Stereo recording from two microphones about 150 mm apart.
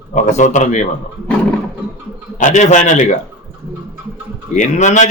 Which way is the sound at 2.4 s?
50° left (ahead or behind).